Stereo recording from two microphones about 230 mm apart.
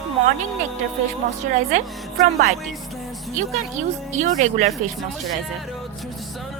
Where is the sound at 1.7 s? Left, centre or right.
Right.